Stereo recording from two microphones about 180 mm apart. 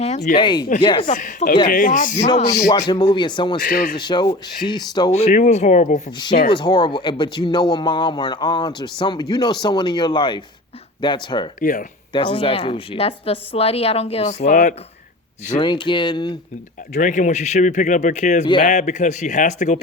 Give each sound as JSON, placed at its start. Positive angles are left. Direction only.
{"t": 0.3, "sound": "speech", "side_deg": 25}
{"t": 1.0, "sound": "speech", "side_deg": 45}
{"t": 2.5, "sound": "speech", "side_deg": 20}
{"t": 3.6, "sound": "speech", "side_deg": 50}
{"t": 3.9, "sound": "speech", "side_deg": 25}
{"t": 5.1, "sound": "speech", "side_deg": 40}
{"t": 6.1, "sound": "speech", "side_deg": 25}
{"t": 11.6, "sound": "speech", "side_deg": 45}
{"t": 12.1, "sound": "speech", "side_deg": 25}
{"t": 15.6, "sound": "speech", "side_deg": 25}
{"t": 17.0, "sound": "speech", "side_deg": 40}